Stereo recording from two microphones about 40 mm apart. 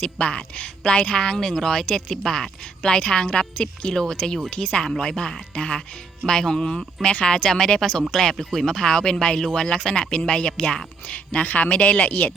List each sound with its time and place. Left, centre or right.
0.0 s a woman's voice: left
7.0 s a woman's voice: left
7.3 s speech: centre
11.4 s speech: left